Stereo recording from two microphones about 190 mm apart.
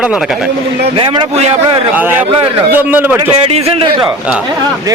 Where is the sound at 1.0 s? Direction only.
30° right (ahead or behind).